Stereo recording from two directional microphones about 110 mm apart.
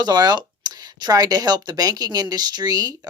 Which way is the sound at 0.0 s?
40° right (ahead or behind).